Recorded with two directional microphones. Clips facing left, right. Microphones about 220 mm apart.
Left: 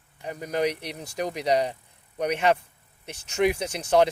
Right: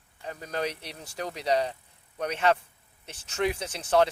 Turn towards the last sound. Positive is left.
turn(degrees=15)  # may be behind; listen again after turning